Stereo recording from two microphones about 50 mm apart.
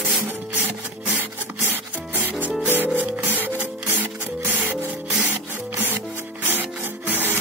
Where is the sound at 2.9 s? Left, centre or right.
Right.